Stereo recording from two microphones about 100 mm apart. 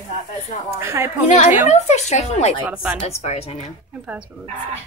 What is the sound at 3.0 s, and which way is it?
Speech, 90° left.